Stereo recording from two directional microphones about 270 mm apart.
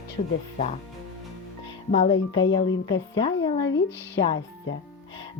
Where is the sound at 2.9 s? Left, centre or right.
Centre.